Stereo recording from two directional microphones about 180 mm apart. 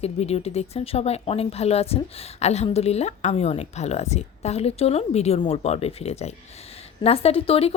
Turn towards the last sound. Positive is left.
turn(degrees=35)  # may be behind; listen again after turning